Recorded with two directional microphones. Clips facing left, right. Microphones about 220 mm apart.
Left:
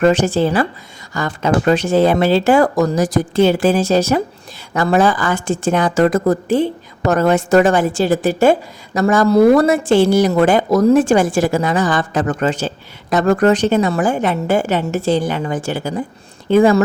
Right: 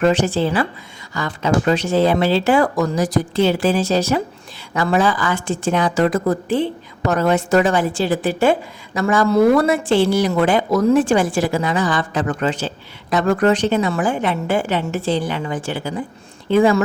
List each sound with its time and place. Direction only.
0.0 s a woman's voice: 45° left (ahead or behind)